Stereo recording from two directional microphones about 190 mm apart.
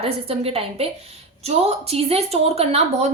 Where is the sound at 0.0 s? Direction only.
30° right (ahead or behind).